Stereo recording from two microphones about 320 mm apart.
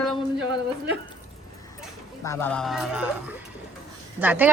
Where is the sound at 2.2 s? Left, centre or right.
Centre.